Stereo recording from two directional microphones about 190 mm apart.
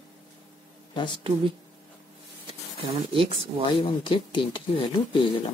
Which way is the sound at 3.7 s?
25° left (ahead or behind).